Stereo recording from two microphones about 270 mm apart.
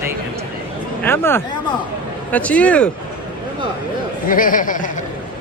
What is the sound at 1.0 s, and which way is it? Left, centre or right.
Speech, centre.